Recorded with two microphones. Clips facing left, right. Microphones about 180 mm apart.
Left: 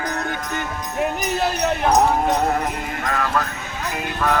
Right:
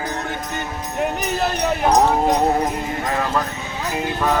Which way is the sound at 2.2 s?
20° right (ahead or behind).